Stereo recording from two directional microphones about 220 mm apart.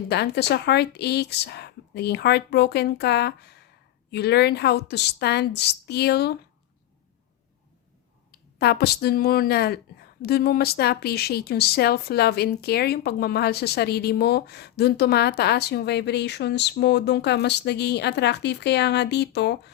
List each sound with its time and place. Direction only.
0.1 s speech: 50° left (ahead or behind)
8.3 s speech: 45° left (ahead or behind)